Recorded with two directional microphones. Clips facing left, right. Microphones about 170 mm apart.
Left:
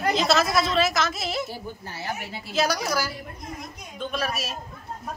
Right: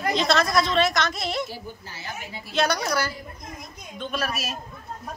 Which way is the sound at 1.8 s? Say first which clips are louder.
Left 4 dB; 60° left (ahead or behind).